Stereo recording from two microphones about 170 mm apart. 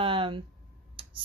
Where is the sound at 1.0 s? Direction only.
30° right (ahead or behind).